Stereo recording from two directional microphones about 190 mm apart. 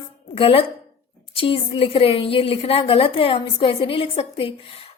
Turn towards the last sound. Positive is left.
turn(degrees=30)  # may be behind; listen again after turning